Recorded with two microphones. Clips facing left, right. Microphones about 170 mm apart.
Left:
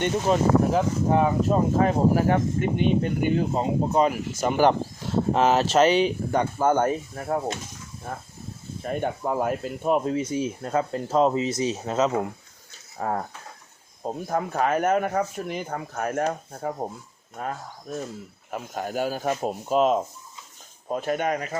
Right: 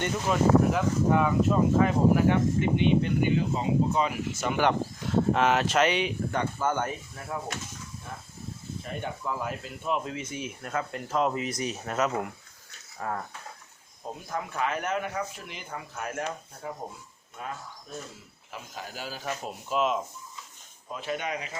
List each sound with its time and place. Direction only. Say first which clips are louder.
0.3 s speech: left 1 dB; 35° left (ahead or behind)
8.8 s speech: left 9 dB; 45° left (ahead or behind); by 12.3 s 25° left (ahead or behind)
13.0 s speech: left 6 dB; 35° left (ahead or behind)